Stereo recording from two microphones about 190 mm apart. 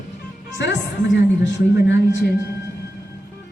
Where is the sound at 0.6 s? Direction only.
70° left (ahead or behind).